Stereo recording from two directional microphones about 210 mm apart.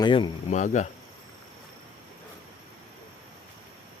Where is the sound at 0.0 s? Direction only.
25° left (ahead or behind).